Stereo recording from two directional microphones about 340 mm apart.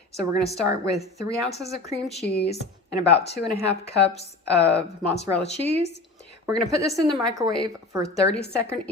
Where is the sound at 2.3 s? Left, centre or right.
Left.